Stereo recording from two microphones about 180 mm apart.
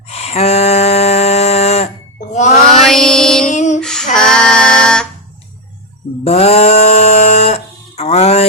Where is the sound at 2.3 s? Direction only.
40° left (ahead or behind).